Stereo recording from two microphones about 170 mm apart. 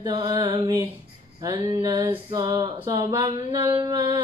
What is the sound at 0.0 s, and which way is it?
Female singing, 25° right (ahead or behind).